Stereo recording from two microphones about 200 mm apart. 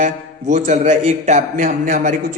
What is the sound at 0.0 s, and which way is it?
A man's voice, 35° right (ahead or behind).